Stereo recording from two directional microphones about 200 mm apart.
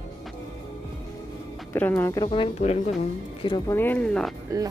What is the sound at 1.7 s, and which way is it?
Speech, 10° left (ahead or behind).